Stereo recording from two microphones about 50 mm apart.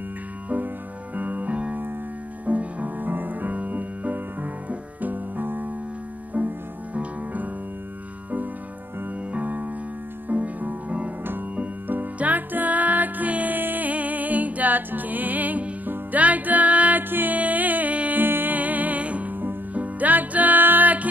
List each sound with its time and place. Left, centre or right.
1.1 s music: right
9.3 s keyboard: right
10.2 s music: right